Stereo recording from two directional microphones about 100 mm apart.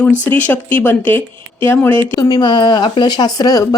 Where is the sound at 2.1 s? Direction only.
40° left (ahead or behind).